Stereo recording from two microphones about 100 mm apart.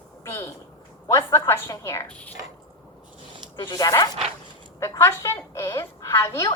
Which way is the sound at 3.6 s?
35° left (ahead or behind).